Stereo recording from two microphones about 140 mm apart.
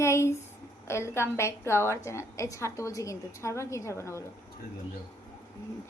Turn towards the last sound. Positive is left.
turn(degrees=20)  # may be behind; listen again after turning